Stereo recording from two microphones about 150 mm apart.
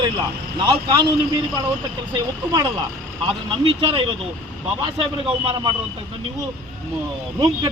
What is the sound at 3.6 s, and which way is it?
A man's voice, 40° right (ahead or behind).